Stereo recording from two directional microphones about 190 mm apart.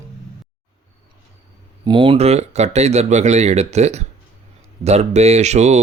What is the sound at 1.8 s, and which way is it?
Speech, 25° right (ahead or behind).